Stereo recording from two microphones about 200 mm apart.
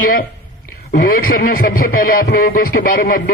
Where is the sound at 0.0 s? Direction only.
45° left (ahead or behind).